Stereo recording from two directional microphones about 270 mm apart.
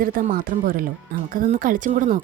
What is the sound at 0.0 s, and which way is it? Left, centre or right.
Speech, right.